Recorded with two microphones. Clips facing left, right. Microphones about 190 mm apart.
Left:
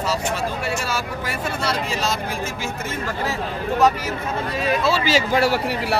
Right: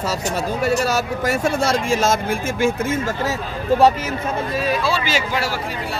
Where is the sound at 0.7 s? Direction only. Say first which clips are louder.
Right 6 dB; 40° right (ahead or behind).